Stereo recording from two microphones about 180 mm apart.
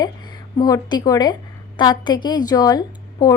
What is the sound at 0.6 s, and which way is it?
A woman's voice, 20° left (ahead or behind).